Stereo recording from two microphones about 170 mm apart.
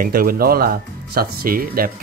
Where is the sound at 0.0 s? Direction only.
60° right (ahead or behind).